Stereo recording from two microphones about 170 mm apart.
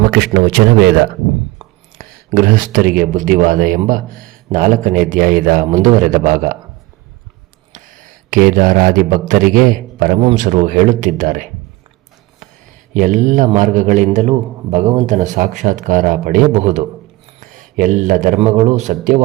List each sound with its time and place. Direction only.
0.1 s a man's voice: 70° right (ahead or behind)
2.0 s a man's voice: 55° right (ahead or behind)
7.7 s a man's voice: 50° right (ahead or behind)
12.9 s a man's voice: 50° right (ahead or behind)